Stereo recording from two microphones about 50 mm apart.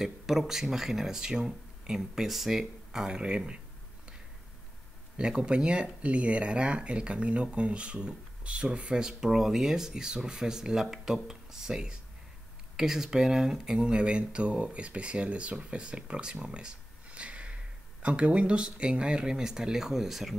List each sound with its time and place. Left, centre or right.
0.0 s speech: centre
2.0 s speech: centre
5.1 s speech: centre